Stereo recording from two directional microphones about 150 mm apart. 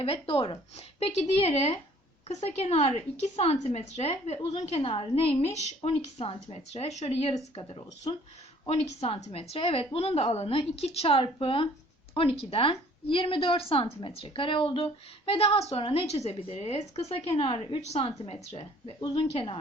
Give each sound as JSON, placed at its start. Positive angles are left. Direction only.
{"t": 0.0, "sound": "a woman's voice", "side_deg": 40}
{"t": 18.9, "sound": "a woman's voice", "side_deg": 30}